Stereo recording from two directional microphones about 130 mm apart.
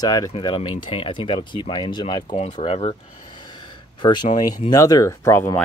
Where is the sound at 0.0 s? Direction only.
30° left (ahead or behind).